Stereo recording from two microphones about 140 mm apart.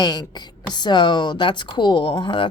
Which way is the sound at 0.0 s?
30° left (ahead or behind).